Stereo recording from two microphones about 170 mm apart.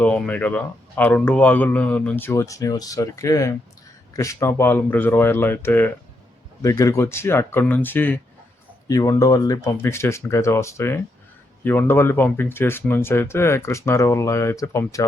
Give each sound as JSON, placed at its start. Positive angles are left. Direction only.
{"t": 0.0, "sound": "speech", "side_deg": 10}